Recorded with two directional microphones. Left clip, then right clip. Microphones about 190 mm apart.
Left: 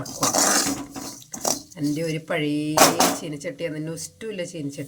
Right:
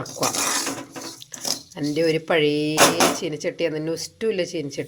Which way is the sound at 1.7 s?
25° right (ahead or behind).